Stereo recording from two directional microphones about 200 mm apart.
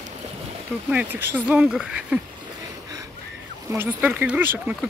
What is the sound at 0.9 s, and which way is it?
Speech, 10° right (ahead or behind).